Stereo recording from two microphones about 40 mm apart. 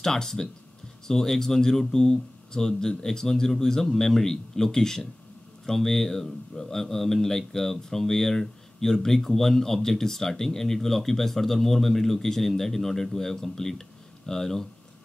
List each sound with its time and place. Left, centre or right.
0.0 s speech: centre